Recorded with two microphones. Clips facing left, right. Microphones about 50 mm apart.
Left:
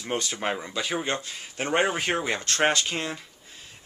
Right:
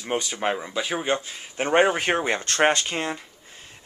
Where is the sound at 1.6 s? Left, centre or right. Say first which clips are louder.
Right 5 dB; right.